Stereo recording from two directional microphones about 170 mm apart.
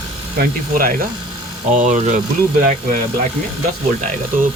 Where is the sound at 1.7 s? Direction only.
45° right (ahead or behind).